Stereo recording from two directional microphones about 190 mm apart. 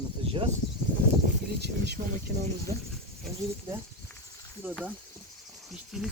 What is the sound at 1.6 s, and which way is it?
Speech, 60° right (ahead or behind).